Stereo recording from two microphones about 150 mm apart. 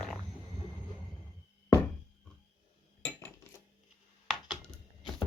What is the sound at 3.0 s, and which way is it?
Cutlery, 10° left (ahead or behind).